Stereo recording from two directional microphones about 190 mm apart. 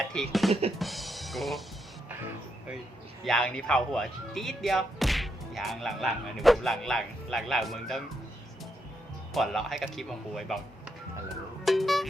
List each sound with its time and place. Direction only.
0.1 s speech: centre (ahead or behind)
0.8 s drum: centre (ahead or behind)
3.2 s speech: 5° left (ahead or behind)
9.3 s speech: centre (ahead or behind)
11.6 s music: centre (ahead or behind)